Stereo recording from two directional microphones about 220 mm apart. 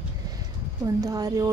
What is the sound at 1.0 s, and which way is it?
Speech, 15° right (ahead or behind).